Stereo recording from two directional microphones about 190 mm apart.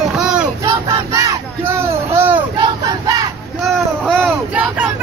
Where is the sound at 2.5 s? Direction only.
25° right (ahead or behind).